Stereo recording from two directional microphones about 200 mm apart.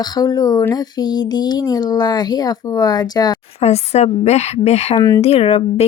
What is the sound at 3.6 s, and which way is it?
Speech, 30° left (ahead or behind).